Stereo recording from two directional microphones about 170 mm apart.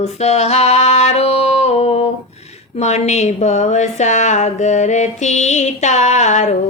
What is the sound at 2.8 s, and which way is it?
Speech, 40° left (ahead or behind).